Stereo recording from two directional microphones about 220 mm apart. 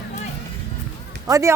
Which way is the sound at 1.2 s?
15° right (ahead or behind).